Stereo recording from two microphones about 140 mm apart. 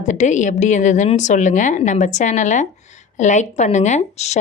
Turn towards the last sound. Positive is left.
turn(degrees=55)  # may be behind; listen again after turning